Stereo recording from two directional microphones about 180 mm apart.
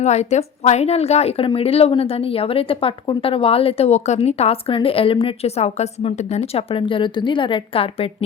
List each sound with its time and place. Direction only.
0.0 s speech: 40° left (ahead or behind)